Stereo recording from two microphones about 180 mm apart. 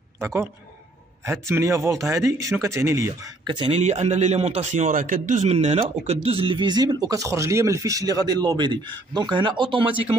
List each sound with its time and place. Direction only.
0.2 s speech: 15° right (ahead or behind)